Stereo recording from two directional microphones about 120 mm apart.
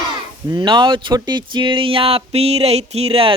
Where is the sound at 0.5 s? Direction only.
40° right (ahead or behind).